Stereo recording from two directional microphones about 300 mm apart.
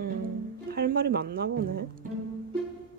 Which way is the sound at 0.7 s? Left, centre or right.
Right.